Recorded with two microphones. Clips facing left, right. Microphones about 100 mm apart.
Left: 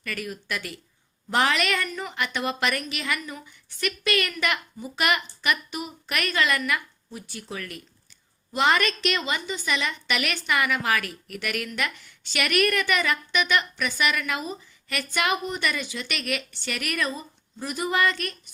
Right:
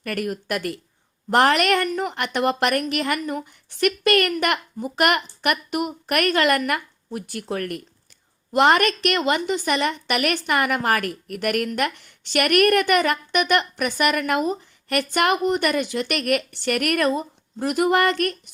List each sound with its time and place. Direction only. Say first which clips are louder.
0.0 s a woman's voice: right 7 dB; 55° right (ahead or behind)
15.6 s speech: right 7 dB; 50° right (ahead or behind)